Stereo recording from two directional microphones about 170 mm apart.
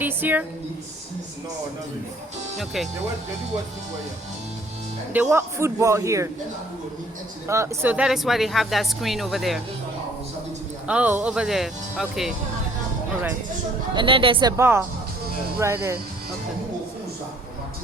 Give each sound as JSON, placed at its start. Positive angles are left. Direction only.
{"t": 0.0, "sound": "a man's voice", "side_deg": -10}
{"t": 2.6, "sound": "speech", "side_deg": 0}
{"t": 5.1, "sound": "a man's voice", "side_deg": -10}
{"t": 7.4, "sound": "speech", "side_deg": -15}
{"t": 10.8, "sound": "speech", "side_deg": -10}
{"t": 13.9, "sound": "speech", "side_deg": -30}
{"t": 14.5, "sound": "a man's voice", "side_deg": -15}